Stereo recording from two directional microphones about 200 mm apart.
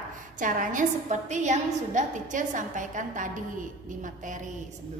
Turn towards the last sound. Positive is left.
turn(degrees=-40)  # may be behind; listen again after turning